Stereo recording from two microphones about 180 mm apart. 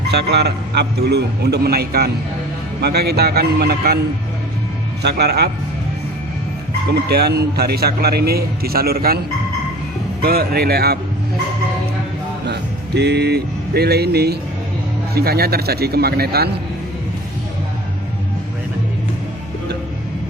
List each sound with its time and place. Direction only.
0.1 s a man's voice: 65° right (ahead or behind)
5.0 s a man's voice: 65° right (ahead or behind)
6.9 s a man's voice: 60° right (ahead or behind)
10.2 s a man's voice: 60° right (ahead or behind)
12.5 s a man's voice: 70° right (ahead or behind)